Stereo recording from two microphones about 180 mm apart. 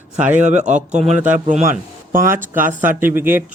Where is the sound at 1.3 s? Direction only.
45° right (ahead or behind).